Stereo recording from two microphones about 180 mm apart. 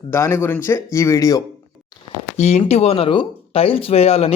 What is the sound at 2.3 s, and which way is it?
Speech, 40° left (ahead or behind).